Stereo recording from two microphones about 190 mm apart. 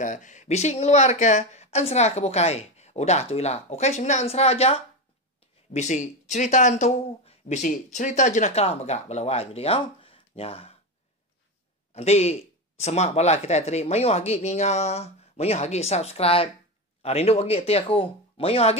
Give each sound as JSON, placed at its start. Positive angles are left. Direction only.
{"t": 0.0, "sound": "speech", "side_deg": 40}
{"t": 11.9, "sound": "speech", "side_deg": 35}